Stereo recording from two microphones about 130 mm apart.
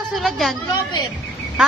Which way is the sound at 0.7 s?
30° left (ahead or behind).